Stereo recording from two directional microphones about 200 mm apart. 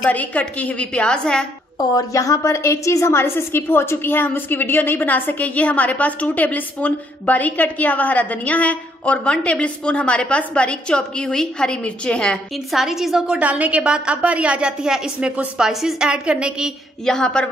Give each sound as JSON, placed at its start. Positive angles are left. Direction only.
{"t": 0.0, "sound": "a woman's voice", "side_deg": 5}
{"t": 1.8, "sound": "a woman's voice", "side_deg": 15}